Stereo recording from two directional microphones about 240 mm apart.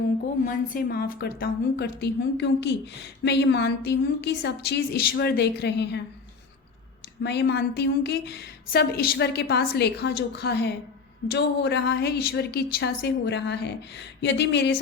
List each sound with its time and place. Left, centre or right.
0.4 s a woman's voice: left
7.2 s a woman's voice: left